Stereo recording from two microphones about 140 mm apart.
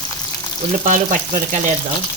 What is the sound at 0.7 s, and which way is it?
Speech, 65° right (ahead or behind).